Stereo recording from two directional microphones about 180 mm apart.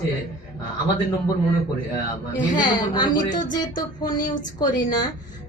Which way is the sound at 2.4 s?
25° left (ahead or behind).